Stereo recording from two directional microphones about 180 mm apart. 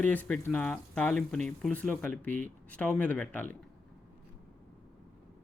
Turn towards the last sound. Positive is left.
turn(degrees=10)  # may be behind; listen again after turning